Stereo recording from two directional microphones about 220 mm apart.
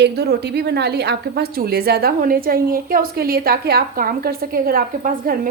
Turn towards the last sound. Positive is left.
turn(degrees=-40)  # may be behind; listen again after turning